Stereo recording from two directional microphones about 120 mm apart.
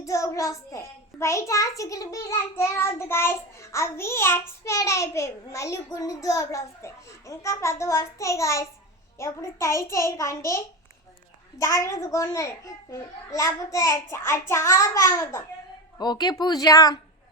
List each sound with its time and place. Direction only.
0.0 s a child's voice: 25° left (ahead or behind)
11.6 s a child's voice: 25° left (ahead or behind)
16.0 s speech: 35° left (ahead or behind)